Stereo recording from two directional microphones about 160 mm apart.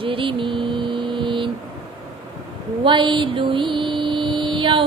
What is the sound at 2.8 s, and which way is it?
Mantra, 30° right (ahead or behind).